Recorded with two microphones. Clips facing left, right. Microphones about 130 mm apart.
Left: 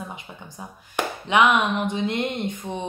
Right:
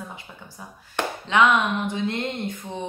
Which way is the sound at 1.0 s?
15° left (ahead or behind).